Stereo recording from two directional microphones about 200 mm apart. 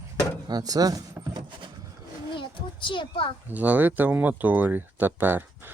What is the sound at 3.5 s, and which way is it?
Speech, 10° right (ahead or behind).